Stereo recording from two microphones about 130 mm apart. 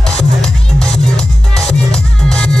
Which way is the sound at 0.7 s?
5° left (ahead or behind).